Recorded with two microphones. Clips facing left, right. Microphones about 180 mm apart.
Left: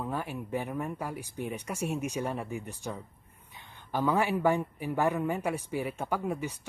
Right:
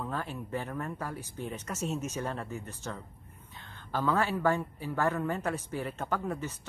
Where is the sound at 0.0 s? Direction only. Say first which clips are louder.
Left 2 dB; 15° left (ahead or behind).